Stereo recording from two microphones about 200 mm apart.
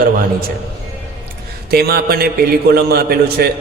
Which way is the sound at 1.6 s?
50° right (ahead or behind).